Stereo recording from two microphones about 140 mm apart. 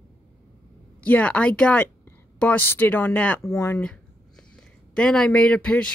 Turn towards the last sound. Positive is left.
turn(degrees=10)  # may be behind; listen again after turning